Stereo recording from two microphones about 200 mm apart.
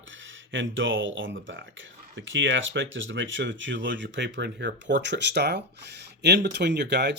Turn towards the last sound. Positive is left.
turn(degrees=-60)  # may be behind; listen again after turning